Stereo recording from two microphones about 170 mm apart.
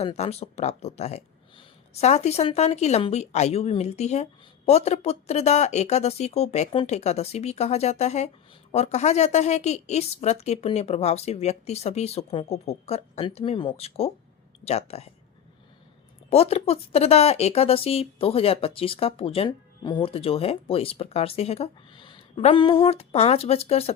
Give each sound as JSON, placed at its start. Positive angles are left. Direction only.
{"t": 0.0, "sound": "speech", "side_deg": 35}
{"t": 16.3, "sound": "speech", "side_deg": 40}